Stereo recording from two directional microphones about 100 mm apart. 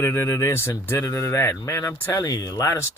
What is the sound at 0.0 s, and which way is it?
Speech, 25° left (ahead or behind).